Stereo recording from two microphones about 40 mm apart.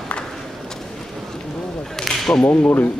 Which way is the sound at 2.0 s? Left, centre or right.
Centre.